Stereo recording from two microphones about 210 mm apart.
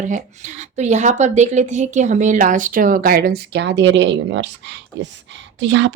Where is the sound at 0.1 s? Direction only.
35° right (ahead or behind).